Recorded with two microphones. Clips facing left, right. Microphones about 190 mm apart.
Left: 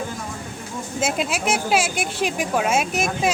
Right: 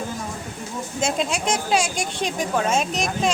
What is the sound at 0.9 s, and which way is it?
Speech, 5° left (ahead or behind).